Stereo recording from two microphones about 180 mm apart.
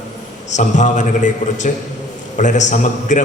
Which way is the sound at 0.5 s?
45° left (ahead or behind).